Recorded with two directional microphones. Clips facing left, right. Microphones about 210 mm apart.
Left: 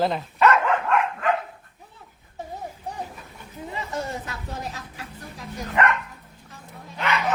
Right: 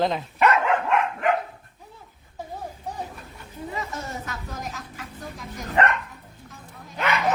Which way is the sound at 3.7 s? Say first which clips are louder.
Left 3 dB; 30° left (ahead or behind).